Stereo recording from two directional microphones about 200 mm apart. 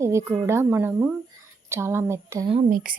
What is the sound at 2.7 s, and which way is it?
Speech, 45° right (ahead or behind).